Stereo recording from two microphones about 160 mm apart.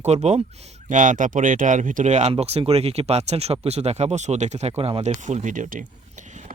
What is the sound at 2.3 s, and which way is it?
Speech, 35° right (ahead or behind).